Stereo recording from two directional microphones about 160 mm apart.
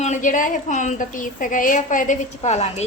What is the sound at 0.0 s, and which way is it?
A woman's voice, 50° left (ahead or behind).